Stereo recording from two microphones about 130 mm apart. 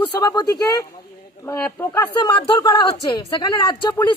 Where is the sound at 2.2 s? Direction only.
35° left (ahead or behind).